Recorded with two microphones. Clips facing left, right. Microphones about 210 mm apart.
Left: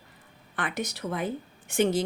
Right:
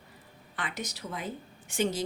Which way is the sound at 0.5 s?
55° left (ahead or behind).